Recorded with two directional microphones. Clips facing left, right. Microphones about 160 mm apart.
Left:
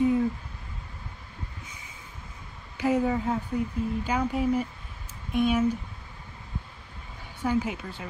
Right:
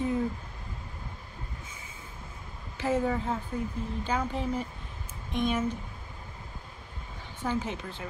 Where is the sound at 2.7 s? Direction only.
10° left (ahead or behind).